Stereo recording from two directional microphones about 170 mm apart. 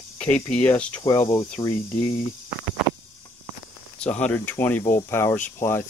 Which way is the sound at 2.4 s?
10° right (ahead or behind).